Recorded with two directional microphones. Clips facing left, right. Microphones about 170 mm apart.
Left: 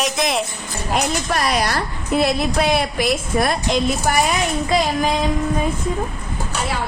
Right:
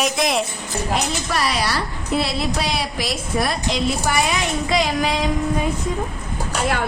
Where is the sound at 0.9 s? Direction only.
50° left (ahead or behind).